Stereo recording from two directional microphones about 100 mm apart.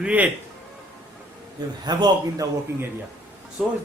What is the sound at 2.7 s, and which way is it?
Speech, 25° right (ahead or behind).